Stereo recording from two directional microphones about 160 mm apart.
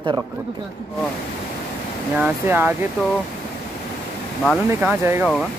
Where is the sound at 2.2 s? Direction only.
10° right (ahead or behind).